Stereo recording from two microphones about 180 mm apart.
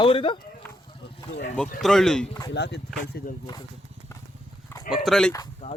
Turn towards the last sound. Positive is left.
turn(degrees=35)  # may be behind; listen again after turning